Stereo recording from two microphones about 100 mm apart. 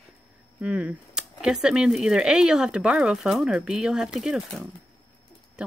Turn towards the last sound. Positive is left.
turn(degrees=-5)  # may be behind; listen again after turning